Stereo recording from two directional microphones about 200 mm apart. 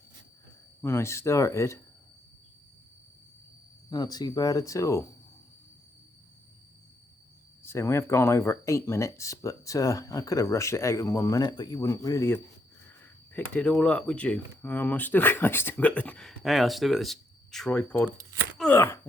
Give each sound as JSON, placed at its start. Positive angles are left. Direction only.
{"t": 0.8, "sound": "speech", "side_deg": 10}
{"t": 3.8, "sound": "speech", "side_deg": 20}
{"t": 7.6, "sound": "speech", "side_deg": 15}
{"t": 18.5, "sound": "a sound", "side_deg": 10}